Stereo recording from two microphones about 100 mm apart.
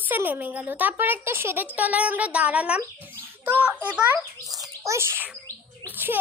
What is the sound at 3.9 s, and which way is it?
Speech, 10° right (ahead or behind).